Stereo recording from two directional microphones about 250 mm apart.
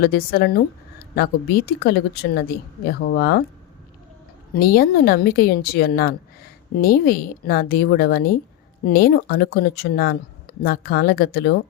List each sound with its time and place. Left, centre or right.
0.0 s speech: left
4.5 s speech: left